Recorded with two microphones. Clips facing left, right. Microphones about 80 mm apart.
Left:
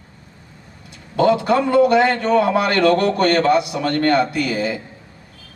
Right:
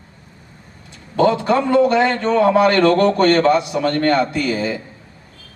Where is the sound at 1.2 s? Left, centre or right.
Right.